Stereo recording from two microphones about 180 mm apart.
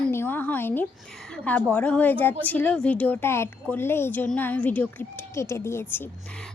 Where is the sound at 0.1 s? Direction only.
10° left (ahead or behind).